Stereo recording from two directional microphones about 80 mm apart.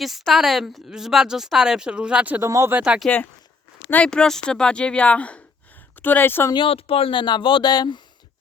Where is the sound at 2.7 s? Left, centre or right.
Centre.